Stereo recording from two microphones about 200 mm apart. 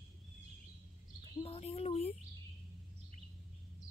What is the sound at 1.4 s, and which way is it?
Bird, 30° left (ahead or behind).